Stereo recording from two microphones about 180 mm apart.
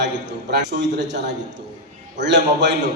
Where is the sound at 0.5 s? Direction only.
70° right (ahead or behind).